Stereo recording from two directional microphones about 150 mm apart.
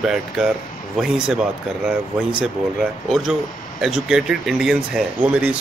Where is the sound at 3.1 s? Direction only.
Centre (ahead or behind).